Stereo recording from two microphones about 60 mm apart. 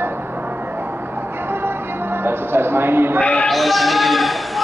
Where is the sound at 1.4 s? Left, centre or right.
Right.